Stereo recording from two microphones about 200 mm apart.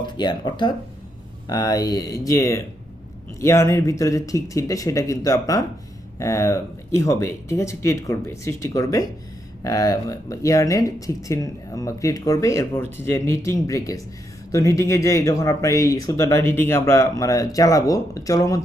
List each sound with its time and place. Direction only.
0.0 s speech: 20° left (ahead or behind)